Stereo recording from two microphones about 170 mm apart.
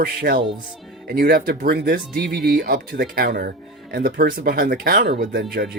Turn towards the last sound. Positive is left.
turn(degrees=-70)  # may be behind; listen again after turning